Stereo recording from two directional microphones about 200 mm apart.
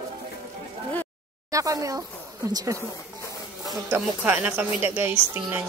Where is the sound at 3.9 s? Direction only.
10° right (ahead or behind).